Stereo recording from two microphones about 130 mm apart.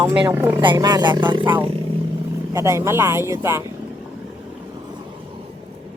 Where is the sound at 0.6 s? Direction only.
35° right (ahead or behind).